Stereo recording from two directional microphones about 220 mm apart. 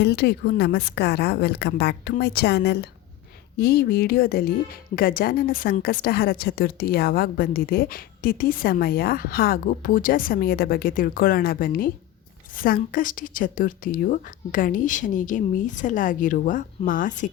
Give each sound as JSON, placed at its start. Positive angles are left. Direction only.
{"t": 0.0, "sound": "a woman's voice", "side_deg": 50}